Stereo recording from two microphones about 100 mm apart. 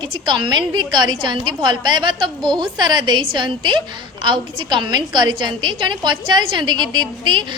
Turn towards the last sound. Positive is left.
turn(degrees=-50)  # may be behind; listen again after turning